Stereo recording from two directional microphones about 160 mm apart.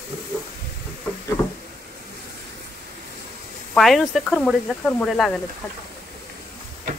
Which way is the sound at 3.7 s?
Centre (ahead or behind).